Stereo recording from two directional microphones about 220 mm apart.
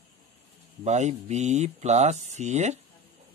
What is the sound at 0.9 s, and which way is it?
Speech, 30° right (ahead or behind).